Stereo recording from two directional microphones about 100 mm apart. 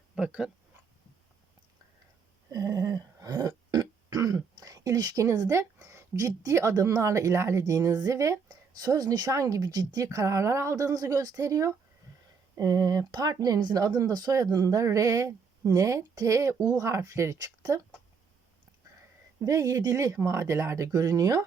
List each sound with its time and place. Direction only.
0.2 s speech: 10° right (ahead or behind)
2.5 s a sound: 35° right (ahead or behind)
12.5 s speech: 40° right (ahead or behind)
19.4 s speech: 35° right (ahead or behind)